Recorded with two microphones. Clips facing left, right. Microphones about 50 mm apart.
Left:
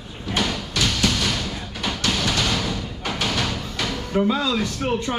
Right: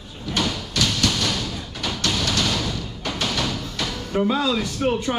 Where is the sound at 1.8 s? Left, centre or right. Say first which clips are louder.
Left 1 dB; centre.